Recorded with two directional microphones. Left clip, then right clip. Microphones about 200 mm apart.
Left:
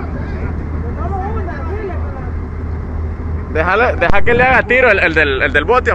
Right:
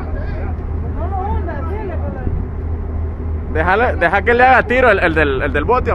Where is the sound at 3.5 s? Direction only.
10° right (ahead or behind).